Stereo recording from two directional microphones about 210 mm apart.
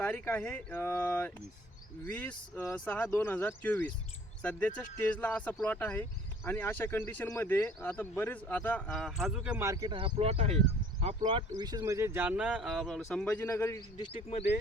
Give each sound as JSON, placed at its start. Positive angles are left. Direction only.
{"t": 0.0, "sound": "speech", "side_deg": 5}
{"t": 5.1, "sound": "speech", "side_deg": 5}
{"t": 13.9, "sound": "speech", "side_deg": 25}